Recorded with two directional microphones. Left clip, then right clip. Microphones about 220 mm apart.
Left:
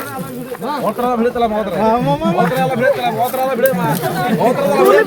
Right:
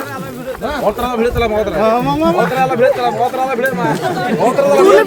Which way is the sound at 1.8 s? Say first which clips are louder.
Right 1 dB; 40° right (ahead or behind).